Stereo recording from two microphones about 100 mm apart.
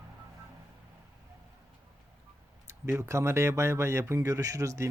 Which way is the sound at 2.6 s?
25° right (ahead or behind).